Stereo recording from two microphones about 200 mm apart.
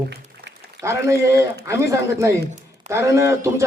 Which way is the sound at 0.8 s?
15° right (ahead or behind).